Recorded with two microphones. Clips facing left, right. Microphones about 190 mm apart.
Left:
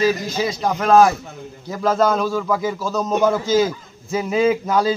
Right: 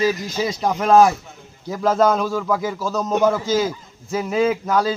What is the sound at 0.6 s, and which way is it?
A man's voice, 10° right (ahead or behind).